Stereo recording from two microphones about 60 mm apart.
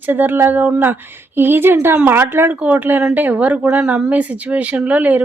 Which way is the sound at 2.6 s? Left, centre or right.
Right.